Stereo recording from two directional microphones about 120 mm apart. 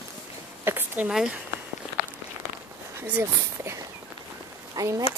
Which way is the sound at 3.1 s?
20° right (ahead or behind).